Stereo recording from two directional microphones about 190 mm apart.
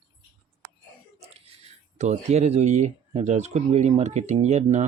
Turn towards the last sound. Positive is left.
turn(degrees=-35)  # may be behind; listen again after turning